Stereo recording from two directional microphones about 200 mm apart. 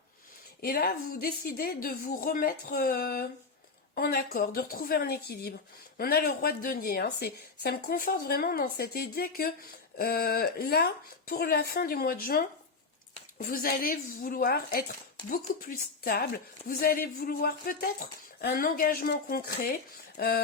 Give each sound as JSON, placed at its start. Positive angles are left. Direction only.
{"t": 0.6, "sound": "a woman's voice", "side_deg": 50}